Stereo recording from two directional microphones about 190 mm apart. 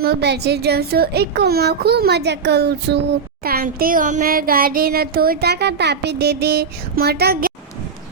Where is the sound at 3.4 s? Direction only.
50° right (ahead or behind).